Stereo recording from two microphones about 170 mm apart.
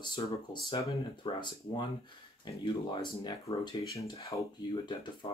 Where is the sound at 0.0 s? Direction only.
25° left (ahead or behind).